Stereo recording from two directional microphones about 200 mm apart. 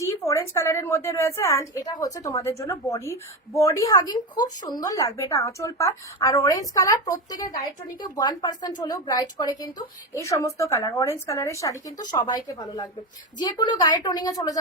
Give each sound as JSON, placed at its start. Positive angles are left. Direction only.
{"t": 0.0, "sound": "a woman's voice", "side_deg": 15}